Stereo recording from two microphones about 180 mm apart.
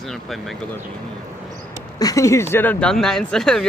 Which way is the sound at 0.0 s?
Centre (ahead or behind).